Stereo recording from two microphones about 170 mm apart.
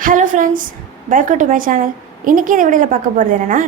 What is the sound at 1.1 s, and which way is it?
A woman's voice, 50° right (ahead or behind).